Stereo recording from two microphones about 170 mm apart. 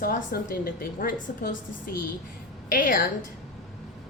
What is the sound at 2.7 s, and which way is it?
Speech, 55° left (ahead or behind).